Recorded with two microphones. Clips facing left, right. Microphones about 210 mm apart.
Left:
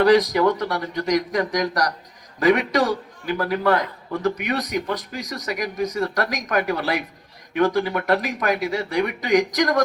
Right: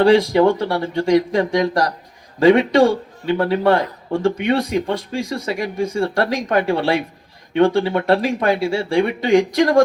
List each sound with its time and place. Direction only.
0.0 s a man's voice: 30° right (ahead or behind)